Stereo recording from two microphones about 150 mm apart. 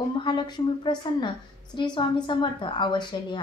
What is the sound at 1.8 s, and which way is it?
A woman's voice, 30° left (ahead or behind).